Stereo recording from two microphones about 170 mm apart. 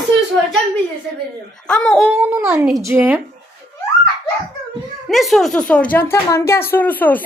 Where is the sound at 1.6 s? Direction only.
5° left (ahead or behind).